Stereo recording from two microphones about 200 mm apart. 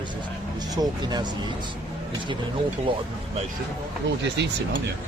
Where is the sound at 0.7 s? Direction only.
20° right (ahead or behind).